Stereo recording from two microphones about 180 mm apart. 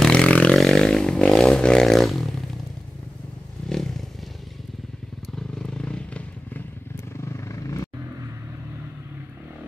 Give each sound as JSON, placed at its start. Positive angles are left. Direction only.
{"t": 0.0, "sound": "a sound", "side_deg": 5}
{"t": 3.6, "sound": "vehicle", "side_deg": 5}
{"t": 5.3, "sound": "vehicle", "side_deg": 5}